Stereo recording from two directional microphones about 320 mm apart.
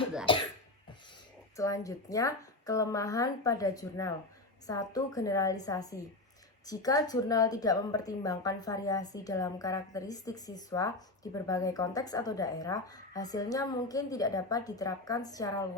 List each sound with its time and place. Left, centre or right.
0.3 s cough: centre
1.5 s a woman's voice: centre